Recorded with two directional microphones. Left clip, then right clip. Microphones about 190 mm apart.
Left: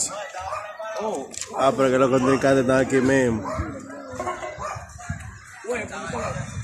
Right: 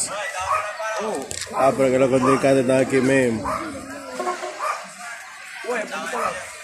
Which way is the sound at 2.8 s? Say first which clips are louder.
Right 1 dB; 35° left (ahead or behind).